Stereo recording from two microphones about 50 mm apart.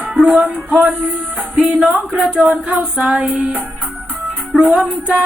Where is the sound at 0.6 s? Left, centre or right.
Right.